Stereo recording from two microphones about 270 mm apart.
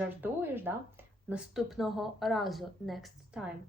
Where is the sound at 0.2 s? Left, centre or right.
Centre.